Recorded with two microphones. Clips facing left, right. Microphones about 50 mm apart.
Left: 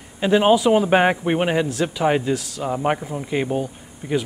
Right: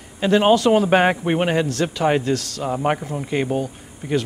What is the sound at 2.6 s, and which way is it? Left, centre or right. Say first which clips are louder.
Speech: even; centre.